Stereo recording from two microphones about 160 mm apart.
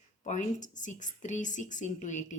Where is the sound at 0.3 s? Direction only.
50° left (ahead or behind).